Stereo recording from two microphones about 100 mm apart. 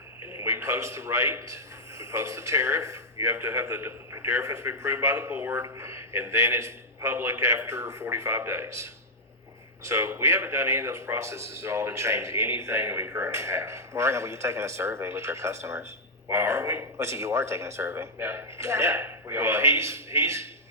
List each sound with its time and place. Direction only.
0.4 s a man's voice: 25° right (ahead or behind)